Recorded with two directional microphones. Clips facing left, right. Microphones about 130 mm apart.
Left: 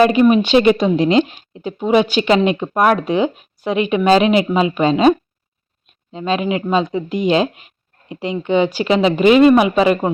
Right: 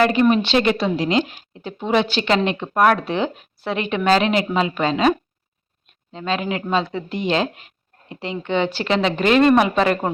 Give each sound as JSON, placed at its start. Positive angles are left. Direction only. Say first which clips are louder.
{"t": 0.0, "sound": "speech", "louder": "left 4 dB", "side_deg": 15}